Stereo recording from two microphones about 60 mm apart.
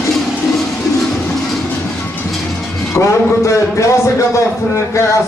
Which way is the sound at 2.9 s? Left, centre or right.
Left.